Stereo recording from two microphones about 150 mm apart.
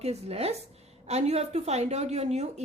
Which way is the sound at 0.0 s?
45° right (ahead or behind).